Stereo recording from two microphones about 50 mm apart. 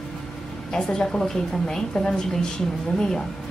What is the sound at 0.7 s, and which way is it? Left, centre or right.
A woman's voice, centre.